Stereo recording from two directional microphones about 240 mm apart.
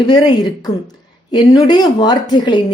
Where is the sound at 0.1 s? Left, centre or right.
Centre.